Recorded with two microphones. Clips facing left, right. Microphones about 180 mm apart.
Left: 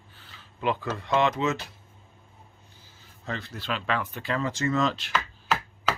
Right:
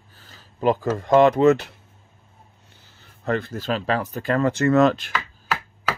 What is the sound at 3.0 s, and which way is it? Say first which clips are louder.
Speech: right 11 dB; 55° right (ahead or behind).